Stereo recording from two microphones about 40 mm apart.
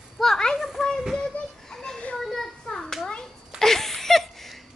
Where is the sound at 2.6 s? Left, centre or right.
Centre.